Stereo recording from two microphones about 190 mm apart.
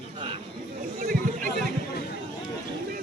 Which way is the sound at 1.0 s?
45° right (ahead or behind).